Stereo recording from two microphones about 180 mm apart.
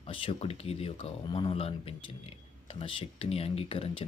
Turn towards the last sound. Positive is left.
turn(degrees=30)  # may be behind; listen again after turning